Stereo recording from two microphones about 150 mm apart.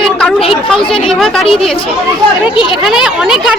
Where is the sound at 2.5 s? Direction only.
35° left (ahead or behind).